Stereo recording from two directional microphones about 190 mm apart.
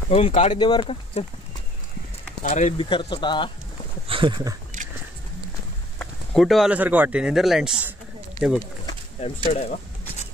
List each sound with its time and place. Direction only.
0.1 s speech: 35° left (ahead or behind)
2.4 s speech: 40° left (ahead or behind)
2.8 s speech: 25° left (ahead or behind)
4.1 s speech: 25° right (ahead or behind)
5.9 s speech: centre (ahead or behind)
9.2 s speech: 35° left (ahead or behind)